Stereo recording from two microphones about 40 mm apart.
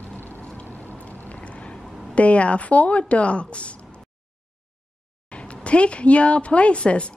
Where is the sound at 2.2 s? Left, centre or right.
Left.